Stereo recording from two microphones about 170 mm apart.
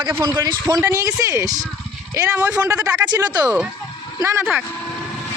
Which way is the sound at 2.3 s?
10° right (ahead or behind).